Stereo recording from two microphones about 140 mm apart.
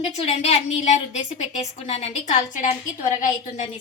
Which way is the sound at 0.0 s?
50° left (ahead or behind).